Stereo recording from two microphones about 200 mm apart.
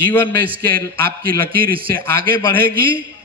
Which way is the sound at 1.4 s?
45° right (ahead or behind).